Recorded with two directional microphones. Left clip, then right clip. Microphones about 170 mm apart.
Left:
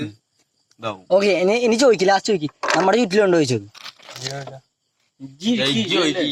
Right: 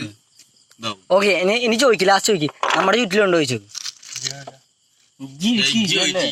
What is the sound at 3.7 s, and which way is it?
Crumpling, 50° left (ahead or behind).